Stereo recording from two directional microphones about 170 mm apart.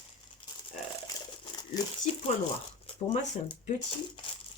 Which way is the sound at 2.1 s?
35° left (ahead or behind).